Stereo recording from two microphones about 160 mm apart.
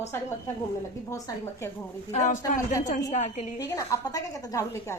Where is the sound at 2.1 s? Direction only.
50° left (ahead or behind).